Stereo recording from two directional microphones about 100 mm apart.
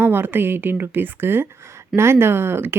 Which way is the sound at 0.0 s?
20° right (ahead or behind).